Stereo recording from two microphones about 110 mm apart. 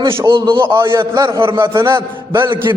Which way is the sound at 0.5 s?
25° right (ahead or behind).